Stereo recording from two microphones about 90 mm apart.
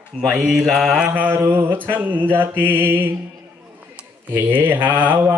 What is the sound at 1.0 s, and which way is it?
Mantra, 20° right (ahead or behind).